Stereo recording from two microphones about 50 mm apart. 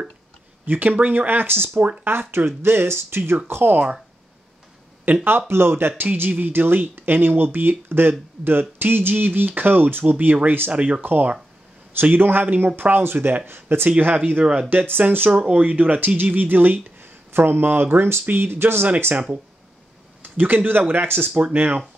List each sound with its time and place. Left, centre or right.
0.7 s speech: right
5.0 s speech: right
10.7 s speech: right
11.0 s speech: right
13.8 s speech: right
14.4 s speech: centre
14.7 s speech: right
15.3 s speech: right
20.2 s speech: right